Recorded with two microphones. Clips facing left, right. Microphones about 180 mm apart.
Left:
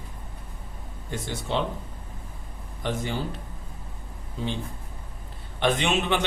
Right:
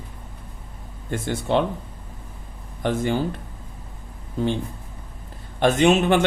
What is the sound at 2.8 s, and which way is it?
Speech, 55° right (ahead or behind).